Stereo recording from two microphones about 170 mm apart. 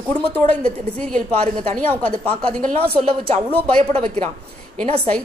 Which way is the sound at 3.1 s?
35° right (ahead or behind).